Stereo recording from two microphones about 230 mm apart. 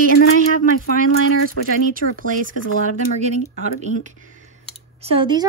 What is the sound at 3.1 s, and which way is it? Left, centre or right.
Speech, right.